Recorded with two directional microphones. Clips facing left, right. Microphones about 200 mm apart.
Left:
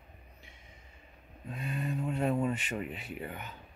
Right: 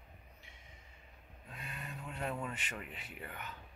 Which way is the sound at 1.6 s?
25° left (ahead or behind).